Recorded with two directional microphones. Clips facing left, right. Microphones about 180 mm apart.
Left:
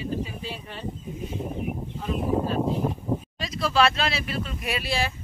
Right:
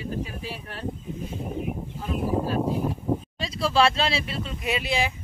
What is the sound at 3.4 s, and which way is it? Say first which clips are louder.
Speech: even; 30° right (ahead or behind).